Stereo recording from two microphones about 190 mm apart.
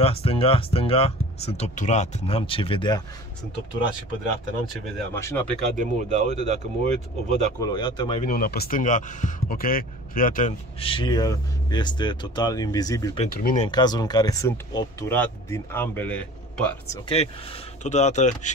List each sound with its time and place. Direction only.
0.0 s speech: 30° left (ahead or behind)
5.1 s speech: 10° left (ahead or behind)
5.8 s speech: 40° right (ahead or behind)
7.6 s speech: 20° left (ahead or behind)
8.2 s speech: 50° left (ahead or behind)
10.8 s speech: 25° left (ahead or behind)
13.3 s speech: 50° left (ahead or behind)
13.7 s speech: 20° left (ahead or behind); by 16.6 s 5° left (ahead or behind)
17.1 s speech: 30° left (ahead or behind)